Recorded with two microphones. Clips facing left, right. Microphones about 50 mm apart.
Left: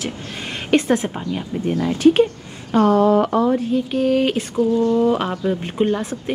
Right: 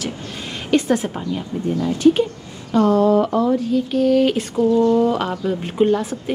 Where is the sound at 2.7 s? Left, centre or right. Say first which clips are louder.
Even; left.